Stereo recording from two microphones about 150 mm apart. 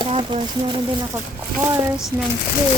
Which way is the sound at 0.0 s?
35° right (ahead or behind).